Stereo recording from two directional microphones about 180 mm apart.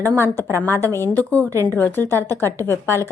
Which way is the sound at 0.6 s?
15° right (ahead or behind).